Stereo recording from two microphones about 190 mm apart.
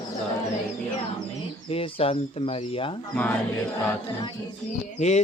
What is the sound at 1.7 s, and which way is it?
Speech, 30° left (ahead or behind).